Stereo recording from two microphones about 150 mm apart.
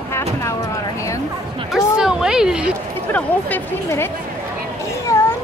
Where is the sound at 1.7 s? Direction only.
5° right (ahead or behind).